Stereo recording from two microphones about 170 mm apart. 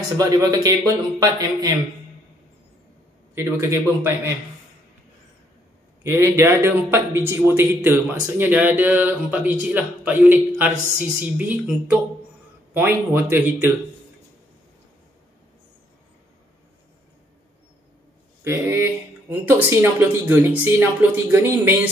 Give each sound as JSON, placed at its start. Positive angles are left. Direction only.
{"t": 0.2, "sound": "a man's voice", "side_deg": -20}
{"t": 3.3, "sound": "speech", "side_deg": -15}
{"t": 6.0, "sound": "speech", "side_deg": -15}
{"t": 18.4, "sound": "speech", "side_deg": -15}